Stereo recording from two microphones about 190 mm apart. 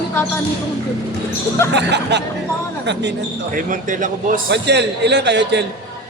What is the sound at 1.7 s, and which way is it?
A man's voice, 65° right (ahead or behind).